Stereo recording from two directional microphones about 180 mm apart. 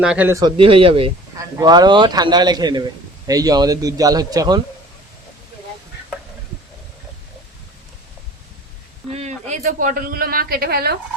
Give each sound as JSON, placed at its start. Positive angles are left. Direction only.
{"t": 0.0, "sound": "a man's voice", "side_deg": -5}
{"t": 0.5, "sound": "a man's voice", "side_deg": -30}
{"t": 9.1, "sound": "speech", "side_deg": -40}